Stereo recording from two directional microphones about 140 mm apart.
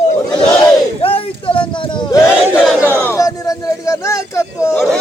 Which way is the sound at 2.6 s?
10° right (ahead or behind).